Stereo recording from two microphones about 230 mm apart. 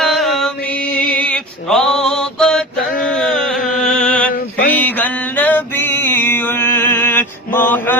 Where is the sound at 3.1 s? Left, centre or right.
Centre.